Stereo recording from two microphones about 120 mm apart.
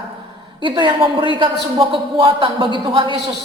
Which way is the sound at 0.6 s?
40° right (ahead or behind).